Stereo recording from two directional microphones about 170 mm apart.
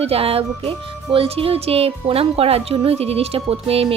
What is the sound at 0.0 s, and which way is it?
Speech, 35° right (ahead or behind).